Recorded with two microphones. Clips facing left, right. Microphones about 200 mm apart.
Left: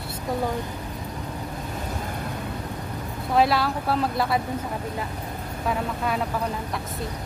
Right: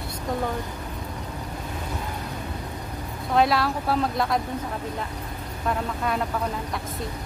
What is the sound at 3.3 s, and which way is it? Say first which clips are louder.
Speech: even; centre (ahead or behind).